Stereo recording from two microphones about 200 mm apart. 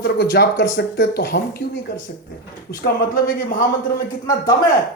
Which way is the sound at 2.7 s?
50° left (ahead or behind).